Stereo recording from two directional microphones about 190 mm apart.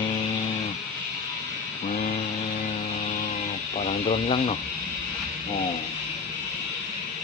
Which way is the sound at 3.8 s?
35° left (ahead or behind).